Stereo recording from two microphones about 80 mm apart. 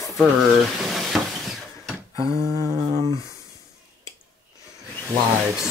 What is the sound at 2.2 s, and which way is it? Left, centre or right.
Speech, left.